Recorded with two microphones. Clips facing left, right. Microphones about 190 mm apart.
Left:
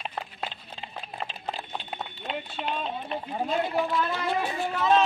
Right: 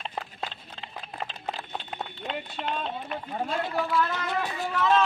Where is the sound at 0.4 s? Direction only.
20° left (ahead or behind).